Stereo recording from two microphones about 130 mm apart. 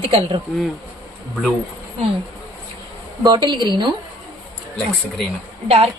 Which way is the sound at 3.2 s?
35° right (ahead or behind).